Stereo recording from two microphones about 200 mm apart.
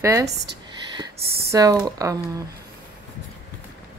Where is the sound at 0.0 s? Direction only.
15° right (ahead or behind).